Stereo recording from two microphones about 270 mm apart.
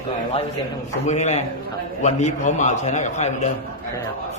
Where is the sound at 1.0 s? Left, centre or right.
Left.